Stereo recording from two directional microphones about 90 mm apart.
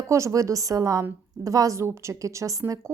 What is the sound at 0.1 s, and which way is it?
Speech, 35° right (ahead or behind).